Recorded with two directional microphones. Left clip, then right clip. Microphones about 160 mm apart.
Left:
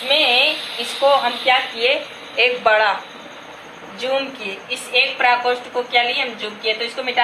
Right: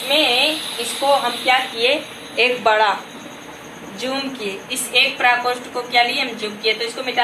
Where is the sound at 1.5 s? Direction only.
15° right (ahead or behind).